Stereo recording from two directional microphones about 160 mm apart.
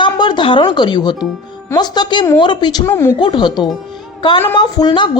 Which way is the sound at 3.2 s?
30° left (ahead or behind).